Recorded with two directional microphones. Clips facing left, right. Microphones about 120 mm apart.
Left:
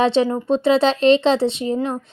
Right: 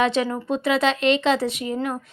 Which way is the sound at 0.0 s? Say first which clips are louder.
Left 4 dB; 30° left (ahead or behind).